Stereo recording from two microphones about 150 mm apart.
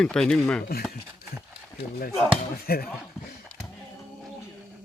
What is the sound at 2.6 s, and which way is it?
Speech, 90° left.